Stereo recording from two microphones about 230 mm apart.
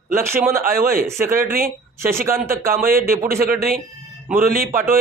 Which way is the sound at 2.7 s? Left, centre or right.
Right.